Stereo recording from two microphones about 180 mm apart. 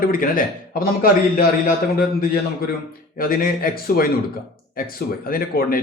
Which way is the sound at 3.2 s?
55° left (ahead or behind).